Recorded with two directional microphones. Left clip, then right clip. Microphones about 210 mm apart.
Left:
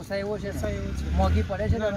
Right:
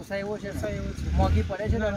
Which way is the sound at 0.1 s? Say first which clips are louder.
Left 2 dB; 10° left (ahead or behind).